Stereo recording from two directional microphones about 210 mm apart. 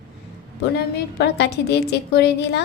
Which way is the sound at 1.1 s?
55° left (ahead or behind).